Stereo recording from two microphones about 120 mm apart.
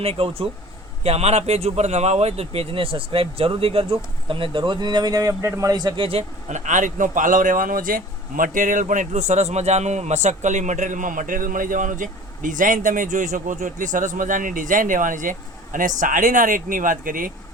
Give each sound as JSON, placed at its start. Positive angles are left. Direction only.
{"t": 0.0, "sound": "speech", "side_deg": -55}
{"t": 6.5, "sound": "speech", "side_deg": -90}
{"t": 8.5, "sound": "speech", "side_deg": -90}